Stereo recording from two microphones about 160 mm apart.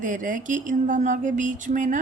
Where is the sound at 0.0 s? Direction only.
55° right (ahead or behind).